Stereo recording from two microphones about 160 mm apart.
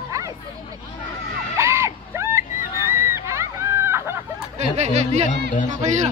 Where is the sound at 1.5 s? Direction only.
15° right (ahead or behind).